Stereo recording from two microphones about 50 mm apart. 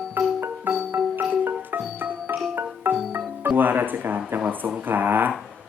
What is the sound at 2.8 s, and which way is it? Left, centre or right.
Marimba, right.